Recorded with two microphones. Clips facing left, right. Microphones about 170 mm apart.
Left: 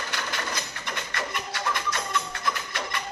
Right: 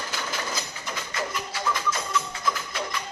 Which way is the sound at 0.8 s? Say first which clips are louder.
Right 2 dB; 65° left (ahead or behind).